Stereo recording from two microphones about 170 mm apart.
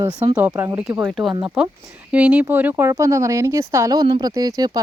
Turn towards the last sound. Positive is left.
turn(degrees=-20)  # may be behind; listen again after turning